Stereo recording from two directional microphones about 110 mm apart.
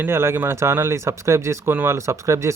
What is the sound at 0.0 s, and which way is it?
Speech, 25° right (ahead or behind).